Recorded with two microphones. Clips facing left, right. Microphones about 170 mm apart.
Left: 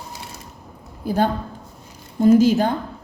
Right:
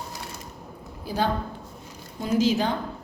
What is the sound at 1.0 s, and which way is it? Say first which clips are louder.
A woman's voice: left 5 dB; 50° left (ahead or behind).